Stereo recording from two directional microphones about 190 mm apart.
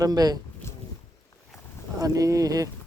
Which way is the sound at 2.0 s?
20° right (ahead or behind).